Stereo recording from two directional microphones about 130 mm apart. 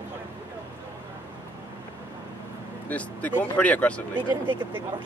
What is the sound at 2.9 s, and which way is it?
A man's voice, 10° left (ahead or behind).